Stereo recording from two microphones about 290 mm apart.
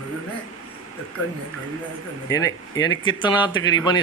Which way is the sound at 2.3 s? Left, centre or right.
Centre.